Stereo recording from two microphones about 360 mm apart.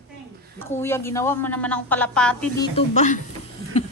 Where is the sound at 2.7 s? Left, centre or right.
Centre.